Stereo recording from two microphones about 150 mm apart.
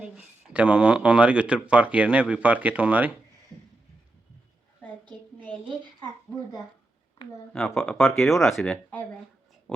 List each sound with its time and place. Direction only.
0.0 s speech: 10° right (ahead or behind)
5.6 s a woman's voice: 30° right (ahead or behind)
7.8 s speech: centre (ahead or behind)
9.7 s a sound: 5° left (ahead or behind)